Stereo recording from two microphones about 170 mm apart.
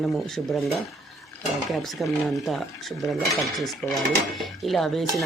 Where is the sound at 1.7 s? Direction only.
Centre (ahead or behind).